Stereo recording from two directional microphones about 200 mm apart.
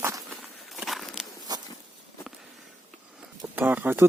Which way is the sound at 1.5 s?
20° right (ahead or behind).